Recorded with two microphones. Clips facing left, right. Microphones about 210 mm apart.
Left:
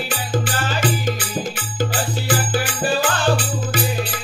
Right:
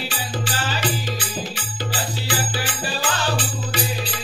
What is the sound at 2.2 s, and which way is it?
Music, 50° left (ahead or behind).